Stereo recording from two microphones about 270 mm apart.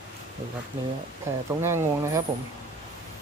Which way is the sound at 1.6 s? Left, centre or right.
Centre.